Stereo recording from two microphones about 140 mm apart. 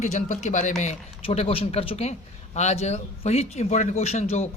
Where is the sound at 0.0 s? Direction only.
55° left (ahead or behind).